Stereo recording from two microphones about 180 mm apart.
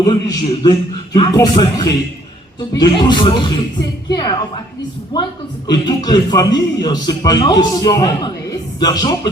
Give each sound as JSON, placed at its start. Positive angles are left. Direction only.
{"t": 0.0, "sound": "speech", "side_deg": 20}
{"t": 5.6, "sound": "speech", "side_deg": 25}